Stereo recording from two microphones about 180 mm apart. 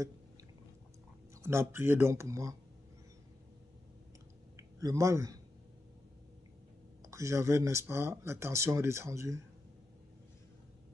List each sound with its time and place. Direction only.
1.4 s speech: 15° right (ahead or behind)
4.6 s speech: 15° right (ahead or behind)
7.0 s speech: 15° right (ahead or behind)